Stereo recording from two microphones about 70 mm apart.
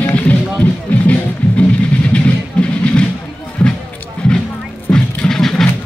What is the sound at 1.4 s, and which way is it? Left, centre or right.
Music, left.